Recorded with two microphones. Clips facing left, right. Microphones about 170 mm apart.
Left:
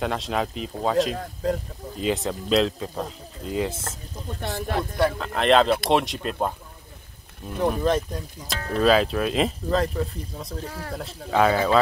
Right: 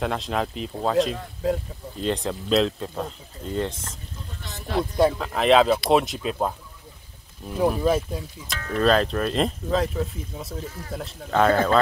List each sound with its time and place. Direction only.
0.0 s speech: centre (ahead or behind)
4.4 s speech: 50° left (ahead or behind)
5.2 s speech: centre (ahead or behind)
7.5 s speech: 5° right (ahead or behind)
8.4 s speech: 35° left (ahead or behind)
8.7 s speech: 5° left (ahead or behind)